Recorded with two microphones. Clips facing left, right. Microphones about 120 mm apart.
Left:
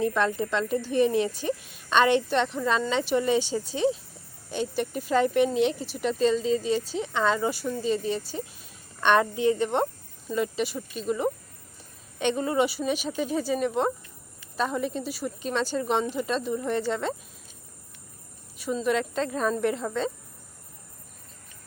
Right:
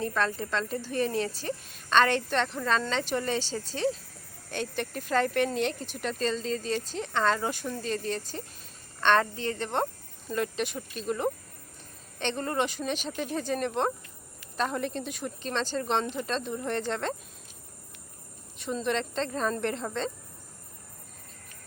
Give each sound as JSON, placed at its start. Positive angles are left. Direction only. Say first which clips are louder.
{"t": 0.0, "sound": "a woman's voice", "louder": "left 4 dB", "side_deg": 15}
{"t": 5.7, "sound": "speech", "louder": "left 4 dB", "side_deg": -50}
{"t": 6.0, "sound": "a woman's voice", "louder": "left 7 dB", "side_deg": 10}
{"t": 18.5, "sound": "a woman's voice", "louder": "left 4 dB", "side_deg": 5}